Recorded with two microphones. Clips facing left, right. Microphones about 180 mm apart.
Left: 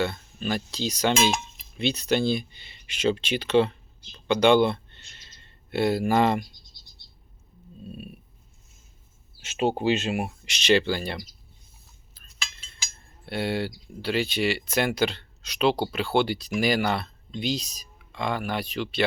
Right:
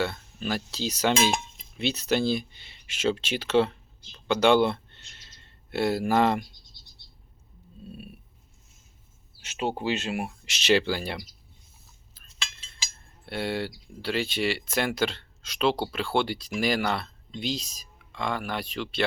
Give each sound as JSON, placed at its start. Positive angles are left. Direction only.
{"t": 0.0, "sound": "speech", "side_deg": -5}
{"t": 7.9, "sound": "a sound", "side_deg": 15}
{"t": 9.4, "sound": "speech", "side_deg": 25}
{"t": 10.4, "sound": "speech", "side_deg": -5}
{"t": 13.2, "sound": "speech", "side_deg": 0}